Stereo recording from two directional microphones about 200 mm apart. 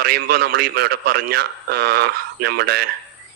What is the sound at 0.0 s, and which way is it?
A man's voice, 50° right (ahead or behind).